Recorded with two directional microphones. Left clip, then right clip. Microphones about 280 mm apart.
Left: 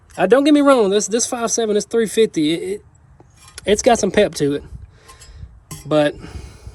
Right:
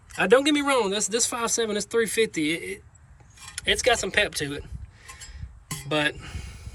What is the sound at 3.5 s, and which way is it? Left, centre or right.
Speech, left.